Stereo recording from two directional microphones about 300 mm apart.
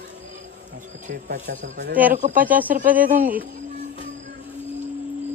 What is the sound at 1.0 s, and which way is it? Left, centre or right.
Speech, right.